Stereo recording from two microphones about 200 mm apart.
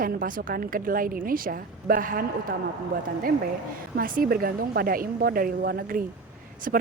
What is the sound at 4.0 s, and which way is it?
Speech, 45° right (ahead or behind).